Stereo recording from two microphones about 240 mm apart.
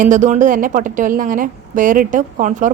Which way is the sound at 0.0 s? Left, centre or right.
Right.